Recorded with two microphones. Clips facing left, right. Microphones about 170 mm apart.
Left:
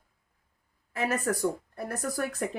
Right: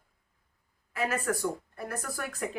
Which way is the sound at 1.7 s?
45° left (ahead or behind).